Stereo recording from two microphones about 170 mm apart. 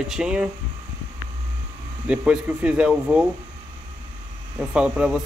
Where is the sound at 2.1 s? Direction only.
5° right (ahead or behind).